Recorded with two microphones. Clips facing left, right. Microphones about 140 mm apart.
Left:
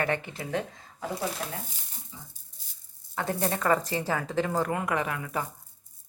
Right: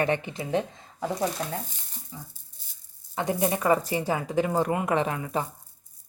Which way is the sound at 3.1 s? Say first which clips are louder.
Right 3 dB; 15° right (ahead or behind).